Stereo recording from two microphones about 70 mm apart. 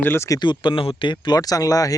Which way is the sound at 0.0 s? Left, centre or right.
Left.